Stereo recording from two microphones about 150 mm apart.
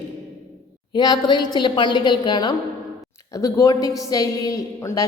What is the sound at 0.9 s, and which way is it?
A woman's voice, 25° left (ahead or behind).